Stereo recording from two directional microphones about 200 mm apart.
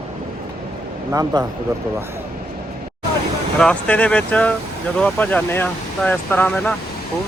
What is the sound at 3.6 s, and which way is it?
Speech, 5° left (ahead or behind).